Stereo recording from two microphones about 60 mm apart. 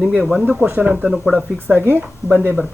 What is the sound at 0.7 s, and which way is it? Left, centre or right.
Speech, right.